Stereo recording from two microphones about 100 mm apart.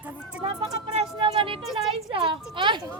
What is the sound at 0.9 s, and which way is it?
Music, 60° right (ahead or behind).